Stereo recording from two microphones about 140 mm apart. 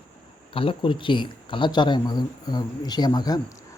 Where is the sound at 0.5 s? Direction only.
40° left (ahead or behind).